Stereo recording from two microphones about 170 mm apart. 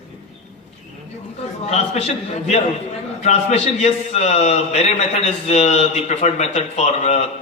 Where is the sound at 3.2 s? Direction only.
40° left (ahead or behind).